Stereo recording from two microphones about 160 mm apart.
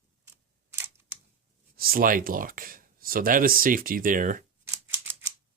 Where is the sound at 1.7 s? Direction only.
65° right (ahead or behind).